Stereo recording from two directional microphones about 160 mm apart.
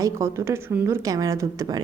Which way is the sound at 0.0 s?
20° right (ahead or behind).